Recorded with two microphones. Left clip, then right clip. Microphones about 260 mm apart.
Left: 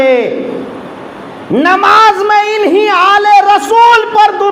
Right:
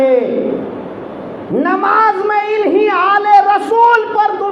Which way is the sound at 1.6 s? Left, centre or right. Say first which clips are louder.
Left 6 dB; left.